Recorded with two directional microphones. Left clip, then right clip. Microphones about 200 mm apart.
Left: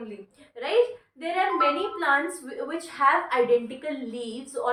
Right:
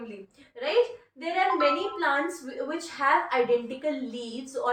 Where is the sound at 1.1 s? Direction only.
20° left (ahead or behind).